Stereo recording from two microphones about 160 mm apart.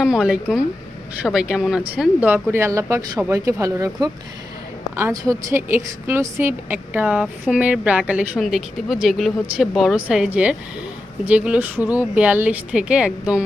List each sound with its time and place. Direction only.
0.0 s a woman's voice: 5° right (ahead or behind)